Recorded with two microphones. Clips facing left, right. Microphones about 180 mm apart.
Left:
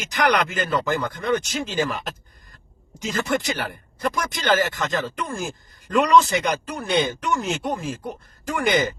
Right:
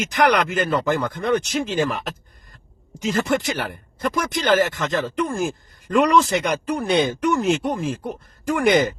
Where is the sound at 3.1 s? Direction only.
45° right (ahead or behind).